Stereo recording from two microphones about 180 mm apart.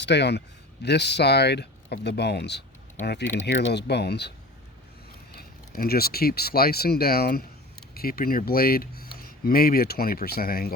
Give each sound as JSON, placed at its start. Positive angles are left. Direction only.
{"t": 0.0, "sound": "speech", "side_deg": 70}
{"t": 5.3, "sound": "speech", "side_deg": 55}